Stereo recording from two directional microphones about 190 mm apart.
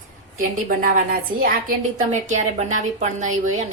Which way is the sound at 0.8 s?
50° right (ahead or behind).